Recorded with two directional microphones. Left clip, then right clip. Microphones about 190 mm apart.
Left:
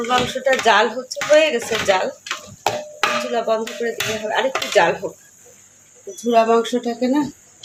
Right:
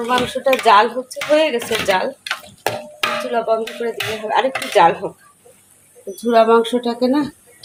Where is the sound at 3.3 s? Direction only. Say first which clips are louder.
Right 2 dB; 20° right (ahead or behind).